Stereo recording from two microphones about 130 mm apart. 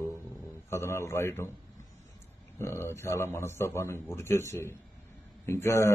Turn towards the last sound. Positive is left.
turn(degrees=20)  # may be behind; listen again after turning